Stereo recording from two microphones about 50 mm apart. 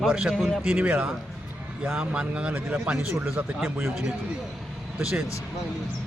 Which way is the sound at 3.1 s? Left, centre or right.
Right.